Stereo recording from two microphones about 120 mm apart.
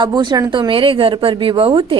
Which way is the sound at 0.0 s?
35° right (ahead or behind).